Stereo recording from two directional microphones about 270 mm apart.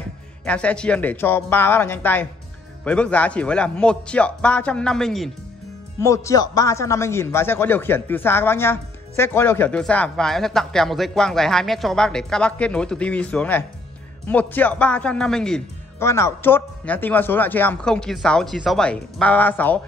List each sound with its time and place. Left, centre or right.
0.5 s a man's voice: centre